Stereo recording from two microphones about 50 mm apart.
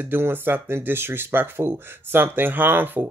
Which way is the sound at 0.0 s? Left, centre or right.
Right.